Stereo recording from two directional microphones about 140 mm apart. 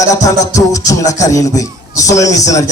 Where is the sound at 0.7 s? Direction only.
25° left (ahead or behind).